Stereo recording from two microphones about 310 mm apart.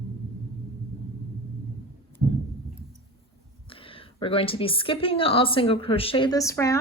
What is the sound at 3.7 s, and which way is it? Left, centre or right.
A woman's voice, centre.